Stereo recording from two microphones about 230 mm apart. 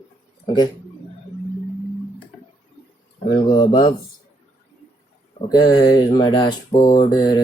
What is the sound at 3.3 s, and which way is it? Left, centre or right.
Mantra, centre.